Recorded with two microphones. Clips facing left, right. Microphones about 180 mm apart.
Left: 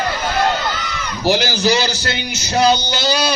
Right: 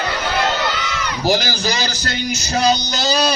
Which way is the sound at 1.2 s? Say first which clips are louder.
Left 3 dB; 45° right (ahead or behind).